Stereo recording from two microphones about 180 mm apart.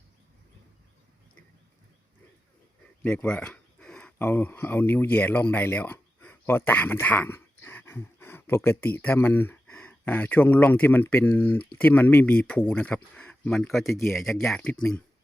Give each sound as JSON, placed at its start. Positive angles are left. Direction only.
{"t": 3.0, "sound": "speech", "side_deg": 10}